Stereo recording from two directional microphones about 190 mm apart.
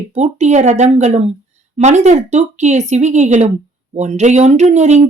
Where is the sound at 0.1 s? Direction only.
35° right (ahead or behind).